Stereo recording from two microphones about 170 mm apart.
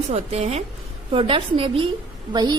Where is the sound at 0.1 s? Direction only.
40° right (ahead or behind).